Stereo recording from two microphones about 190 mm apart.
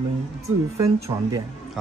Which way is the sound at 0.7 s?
15° right (ahead or behind).